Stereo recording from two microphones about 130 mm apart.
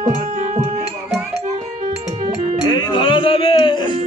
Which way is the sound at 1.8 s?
70° right (ahead or behind).